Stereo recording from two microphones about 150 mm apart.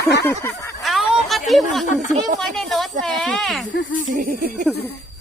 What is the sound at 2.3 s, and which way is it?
A woman's voice, centre (ahead or behind).